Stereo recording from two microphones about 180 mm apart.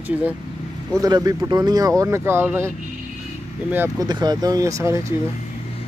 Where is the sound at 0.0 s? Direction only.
10° right (ahead or behind).